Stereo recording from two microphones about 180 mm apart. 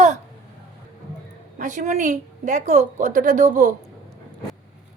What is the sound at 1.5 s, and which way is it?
A woman's voice, 45° right (ahead or behind).